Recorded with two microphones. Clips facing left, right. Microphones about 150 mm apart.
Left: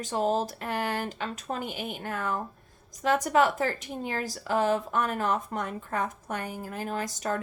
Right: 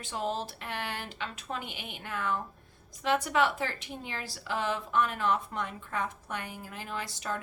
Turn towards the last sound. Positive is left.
turn(degrees=45)  # may be behind; listen again after turning